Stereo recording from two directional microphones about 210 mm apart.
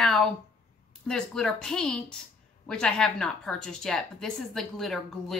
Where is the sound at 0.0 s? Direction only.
Centre (ahead or behind).